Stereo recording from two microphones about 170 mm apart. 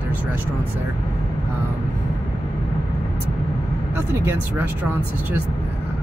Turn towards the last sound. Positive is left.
turn(degrees=-10)  # may be behind; listen again after turning